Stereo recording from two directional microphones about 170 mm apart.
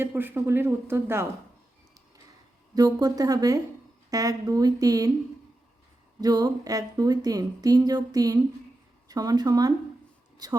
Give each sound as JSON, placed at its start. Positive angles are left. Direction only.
{"t": 0.0, "sound": "speech", "side_deg": -10}
{"t": 2.7, "sound": "speech", "side_deg": -20}
{"t": 6.1, "sound": "speech", "side_deg": -20}